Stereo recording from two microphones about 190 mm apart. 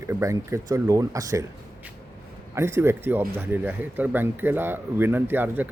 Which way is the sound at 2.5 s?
15° right (ahead or behind).